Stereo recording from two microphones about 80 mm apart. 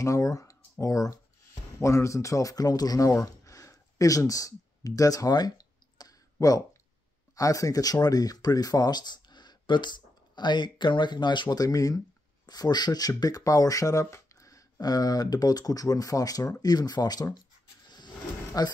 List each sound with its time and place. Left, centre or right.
0.0 s speech: left
3.1 s a sound: left
7.3 s speech: left
12.4 s speech: left
18.6 s speech: left